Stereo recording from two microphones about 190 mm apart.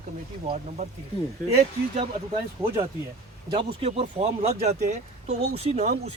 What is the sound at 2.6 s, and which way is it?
Speech, 15° right (ahead or behind).